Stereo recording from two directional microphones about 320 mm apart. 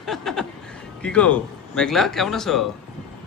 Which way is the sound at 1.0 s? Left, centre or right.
Centre.